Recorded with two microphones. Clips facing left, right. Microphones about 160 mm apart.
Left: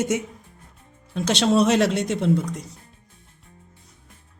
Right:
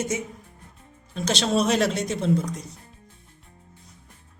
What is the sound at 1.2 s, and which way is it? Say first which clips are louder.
Speech: left 4 dB; 65° left (ahead or behind).